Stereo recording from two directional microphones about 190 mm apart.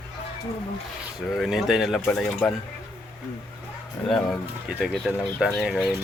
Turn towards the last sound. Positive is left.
turn(degrees=0)  # may be behind; listen again after turning